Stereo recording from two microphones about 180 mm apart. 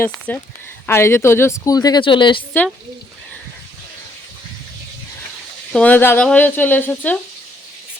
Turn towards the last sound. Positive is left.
turn(degrees=10)  # may be behind; listen again after turning